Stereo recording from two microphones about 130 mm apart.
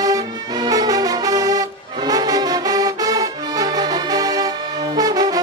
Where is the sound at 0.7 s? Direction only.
30° right (ahead or behind).